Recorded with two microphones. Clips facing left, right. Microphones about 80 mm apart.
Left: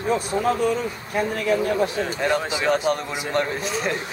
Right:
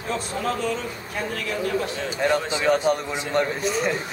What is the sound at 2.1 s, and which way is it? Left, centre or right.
A man's voice, centre.